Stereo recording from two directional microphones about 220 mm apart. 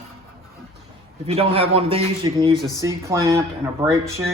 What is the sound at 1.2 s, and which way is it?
A man's voice, 25° right (ahead or behind).